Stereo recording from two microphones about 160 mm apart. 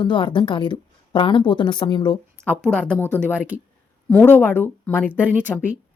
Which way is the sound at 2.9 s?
15° left (ahead or behind).